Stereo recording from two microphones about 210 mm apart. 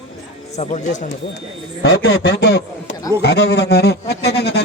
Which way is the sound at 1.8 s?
55° left (ahead or behind).